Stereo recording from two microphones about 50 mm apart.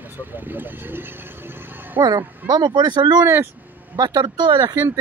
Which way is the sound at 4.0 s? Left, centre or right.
Right.